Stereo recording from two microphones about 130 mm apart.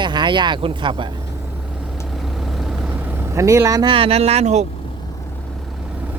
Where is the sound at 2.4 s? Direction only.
Centre (ahead or behind).